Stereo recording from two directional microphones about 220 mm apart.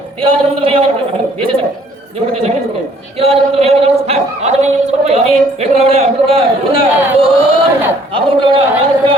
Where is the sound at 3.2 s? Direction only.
25° right (ahead or behind).